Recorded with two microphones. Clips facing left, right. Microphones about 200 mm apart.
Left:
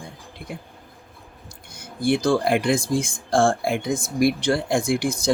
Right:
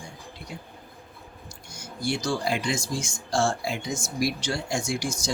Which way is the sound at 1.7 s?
55° left (ahead or behind).